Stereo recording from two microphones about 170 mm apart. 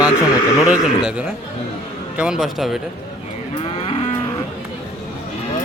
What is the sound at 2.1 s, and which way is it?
Speech, 5° right (ahead or behind).